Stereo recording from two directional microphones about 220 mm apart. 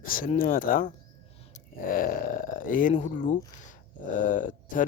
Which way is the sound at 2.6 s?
40° left (ahead or behind).